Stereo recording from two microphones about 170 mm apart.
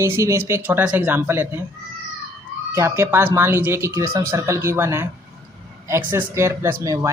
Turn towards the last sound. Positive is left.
turn(degrees=-20)  # may be behind; listen again after turning